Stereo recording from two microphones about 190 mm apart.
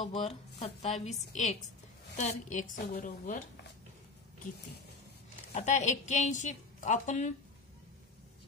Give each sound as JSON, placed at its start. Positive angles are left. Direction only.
{"t": 0.0, "sound": "a woman's voice", "side_deg": 35}
{"t": 5.5, "sound": "a woman's voice", "side_deg": 35}